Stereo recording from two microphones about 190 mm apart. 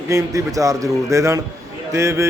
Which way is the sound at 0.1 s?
15° right (ahead or behind).